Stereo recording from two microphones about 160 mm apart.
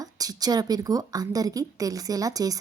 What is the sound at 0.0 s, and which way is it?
A woman's voice, 20° right (ahead or behind).